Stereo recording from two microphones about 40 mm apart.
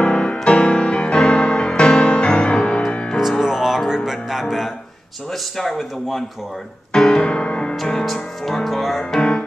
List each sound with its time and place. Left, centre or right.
0.0 s music: left
3.2 s music: centre
5.6 s speech: centre
6.9 s piano: centre
7.2 s music: left
8.0 s speech: centre